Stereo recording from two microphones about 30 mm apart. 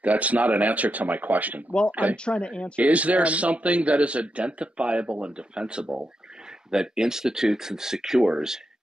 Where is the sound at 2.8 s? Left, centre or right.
Right.